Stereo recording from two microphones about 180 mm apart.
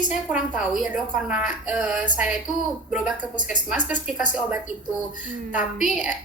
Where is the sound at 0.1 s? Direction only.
5° right (ahead or behind).